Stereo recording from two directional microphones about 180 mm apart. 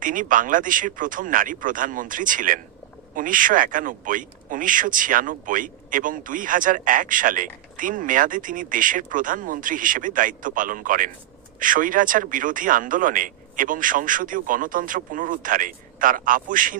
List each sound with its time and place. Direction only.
0.0 s speech: 50° right (ahead or behind)